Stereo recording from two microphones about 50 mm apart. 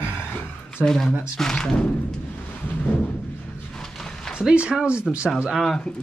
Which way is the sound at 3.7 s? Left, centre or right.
Centre.